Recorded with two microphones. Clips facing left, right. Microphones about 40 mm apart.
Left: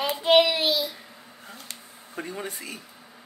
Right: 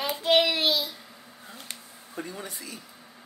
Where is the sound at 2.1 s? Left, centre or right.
Left.